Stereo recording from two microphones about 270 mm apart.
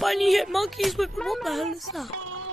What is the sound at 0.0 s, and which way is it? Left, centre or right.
Speech, centre.